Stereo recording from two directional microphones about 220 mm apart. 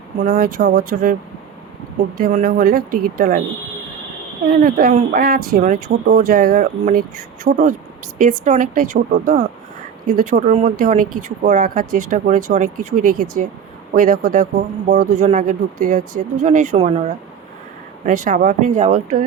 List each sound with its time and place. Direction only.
0.2 s speech: 40° right (ahead or behind)
2.1 s speech: 40° right (ahead or behind)
4.4 s speech: 40° right (ahead or behind)